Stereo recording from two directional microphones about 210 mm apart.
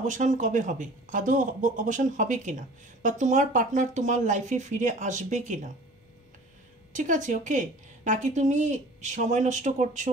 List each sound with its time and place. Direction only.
0.0 s speech: 35° right (ahead or behind)
6.9 s speech: 35° right (ahead or behind)